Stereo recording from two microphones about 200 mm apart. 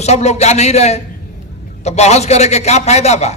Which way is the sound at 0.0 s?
35° left (ahead or behind).